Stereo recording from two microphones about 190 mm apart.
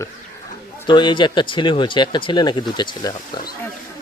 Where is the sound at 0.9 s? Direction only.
25° left (ahead or behind).